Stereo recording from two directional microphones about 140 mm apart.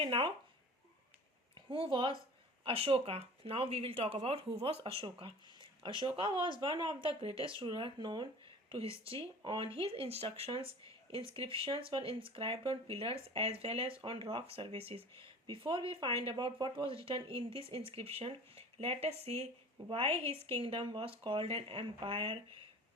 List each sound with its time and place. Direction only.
0.0 s speech: 40° right (ahead or behind)
1.5 s a woman's voice: 35° right (ahead or behind)